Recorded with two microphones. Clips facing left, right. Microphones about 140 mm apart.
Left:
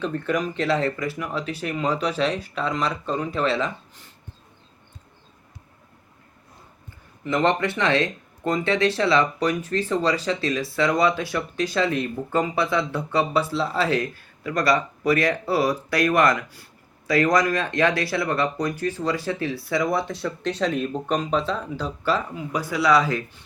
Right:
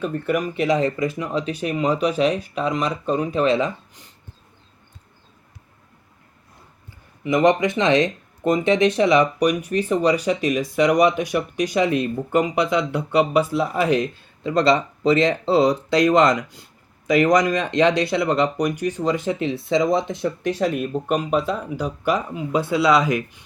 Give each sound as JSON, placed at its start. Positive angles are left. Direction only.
{"t": 0.0, "sound": "speech", "side_deg": -5}
{"t": 7.3, "sound": "speech", "side_deg": -15}